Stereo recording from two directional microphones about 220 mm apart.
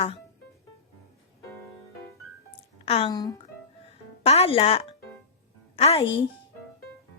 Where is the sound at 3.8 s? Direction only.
25° left (ahead or behind).